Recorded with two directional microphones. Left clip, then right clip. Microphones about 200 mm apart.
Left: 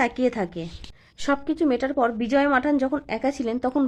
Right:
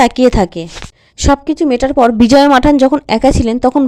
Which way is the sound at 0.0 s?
40° right (ahead or behind).